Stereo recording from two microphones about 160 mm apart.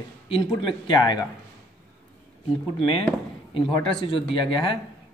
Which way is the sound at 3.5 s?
35° left (ahead or behind).